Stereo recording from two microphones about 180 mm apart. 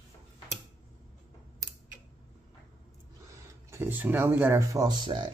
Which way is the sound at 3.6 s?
15° right (ahead or behind).